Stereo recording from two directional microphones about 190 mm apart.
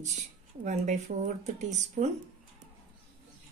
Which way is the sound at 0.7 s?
40° right (ahead or behind).